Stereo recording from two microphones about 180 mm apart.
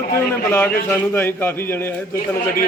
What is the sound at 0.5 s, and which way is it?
Speech, 10° left (ahead or behind).